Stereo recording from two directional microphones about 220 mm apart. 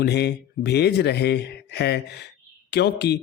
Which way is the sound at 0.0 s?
50° left (ahead or behind).